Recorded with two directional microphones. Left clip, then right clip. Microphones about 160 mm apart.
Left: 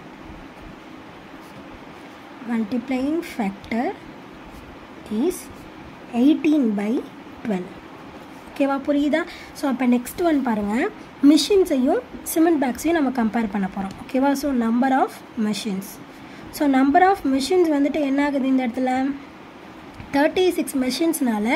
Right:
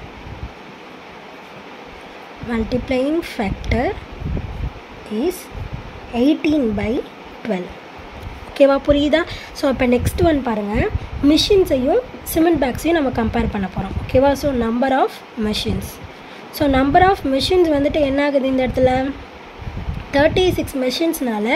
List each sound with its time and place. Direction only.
2.5 s speech: 5° right (ahead or behind)
6.1 s a woman's voice: centre (ahead or behind)
20.1 s a woman's voice: centre (ahead or behind)